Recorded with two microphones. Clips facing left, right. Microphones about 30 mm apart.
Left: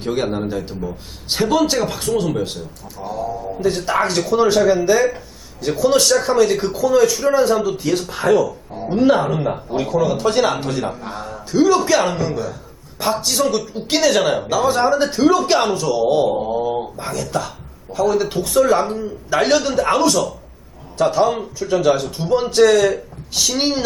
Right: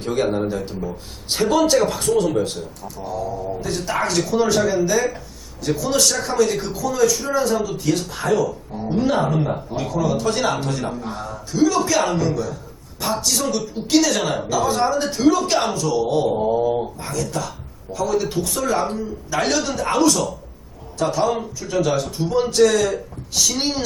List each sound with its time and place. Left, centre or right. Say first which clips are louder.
0.0 s speech: even; centre